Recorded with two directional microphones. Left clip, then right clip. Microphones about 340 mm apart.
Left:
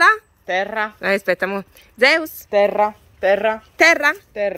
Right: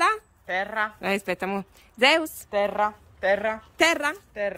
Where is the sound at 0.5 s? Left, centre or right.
Left.